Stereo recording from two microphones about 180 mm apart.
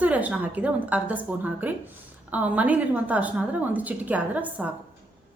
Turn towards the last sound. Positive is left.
turn(degrees=-10)  # may be behind; listen again after turning